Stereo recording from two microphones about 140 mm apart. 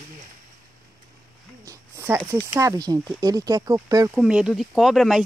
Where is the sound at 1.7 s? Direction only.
20° right (ahead or behind).